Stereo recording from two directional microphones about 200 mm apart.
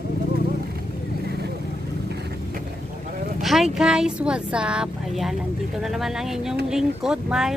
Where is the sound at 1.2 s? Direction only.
55° right (ahead or behind).